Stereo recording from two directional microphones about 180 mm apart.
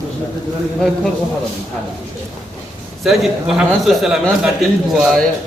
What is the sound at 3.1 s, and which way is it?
A man's voice, centre (ahead or behind).